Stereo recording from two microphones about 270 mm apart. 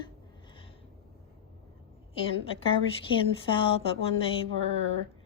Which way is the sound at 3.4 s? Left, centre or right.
Centre.